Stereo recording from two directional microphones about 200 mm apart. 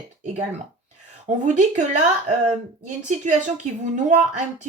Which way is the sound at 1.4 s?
35° right (ahead or behind).